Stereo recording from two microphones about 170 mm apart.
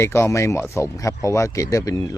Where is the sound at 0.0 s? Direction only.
15° left (ahead or behind).